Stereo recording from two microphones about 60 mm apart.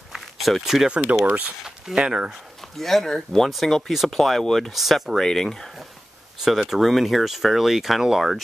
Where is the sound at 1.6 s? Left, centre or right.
Centre.